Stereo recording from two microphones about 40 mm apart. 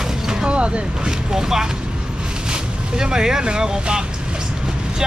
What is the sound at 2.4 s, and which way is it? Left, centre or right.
Vehicle, centre.